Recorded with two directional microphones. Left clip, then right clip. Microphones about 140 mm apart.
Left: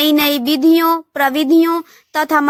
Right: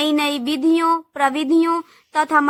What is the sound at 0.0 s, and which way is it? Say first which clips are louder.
A woman's voice: left 5 dB; 30° left (ahead or behind).